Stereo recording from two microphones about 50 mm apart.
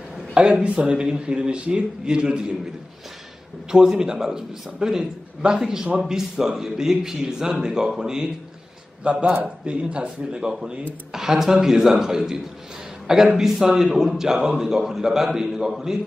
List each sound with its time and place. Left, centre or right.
0.3 s a man's voice: centre
3.7 s a man's voice: centre
9.0 s a man's voice: right
11.1 s a man's voice: centre